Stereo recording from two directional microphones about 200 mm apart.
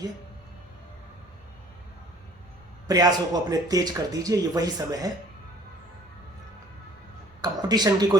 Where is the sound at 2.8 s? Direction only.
20° right (ahead or behind).